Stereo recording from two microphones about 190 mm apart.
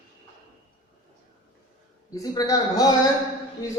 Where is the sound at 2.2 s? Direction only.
20° left (ahead or behind).